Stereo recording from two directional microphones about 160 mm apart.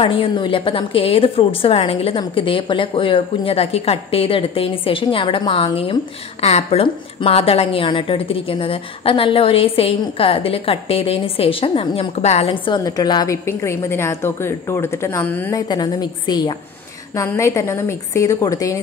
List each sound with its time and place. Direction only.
0.0 s a woman's voice: 30° left (ahead or behind)
12.4 s a woman's voice: 30° left (ahead or behind); by 15.5 s 10° left (ahead or behind)
15.5 s a woman's voice: 25° left (ahead or behind)